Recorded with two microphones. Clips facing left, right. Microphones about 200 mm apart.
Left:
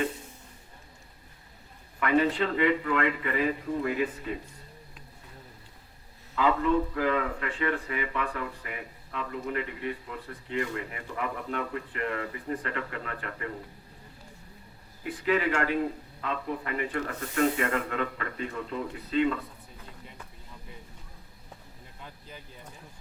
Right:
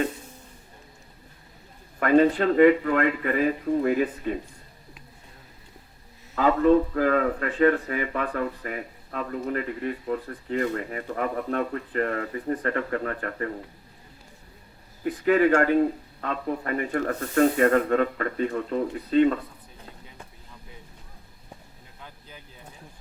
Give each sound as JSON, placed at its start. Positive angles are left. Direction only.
{"t": 2.0, "sound": "speech", "side_deg": -45}
{"t": 6.3, "sound": "speech", "side_deg": -45}
{"t": 15.3, "sound": "speech", "side_deg": -45}